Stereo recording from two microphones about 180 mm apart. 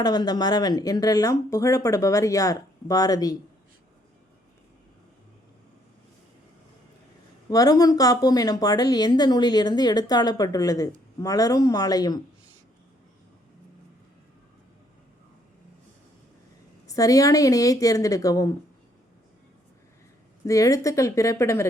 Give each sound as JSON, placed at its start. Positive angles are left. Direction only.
{"t": 0.0, "sound": "a woman's voice", "side_deg": 20}
{"t": 7.5, "sound": "a woman's voice", "side_deg": 20}
{"t": 16.8, "sound": "a woman's voice", "side_deg": 20}
{"t": 20.4, "sound": "speech", "side_deg": 20}